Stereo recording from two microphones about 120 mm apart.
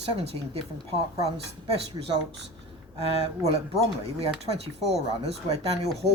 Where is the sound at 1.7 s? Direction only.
55° right (ahead or behind).